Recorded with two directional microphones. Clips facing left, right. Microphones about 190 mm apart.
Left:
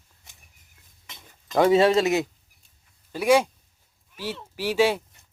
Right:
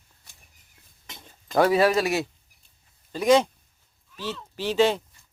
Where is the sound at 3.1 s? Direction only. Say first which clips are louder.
Right 1 dB; 10° left (ahead or behind).